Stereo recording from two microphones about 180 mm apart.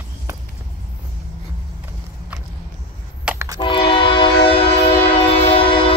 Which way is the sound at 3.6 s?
30° left (ahead or behind).